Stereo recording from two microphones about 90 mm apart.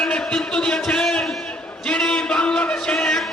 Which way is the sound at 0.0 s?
10° left (ahead or behind).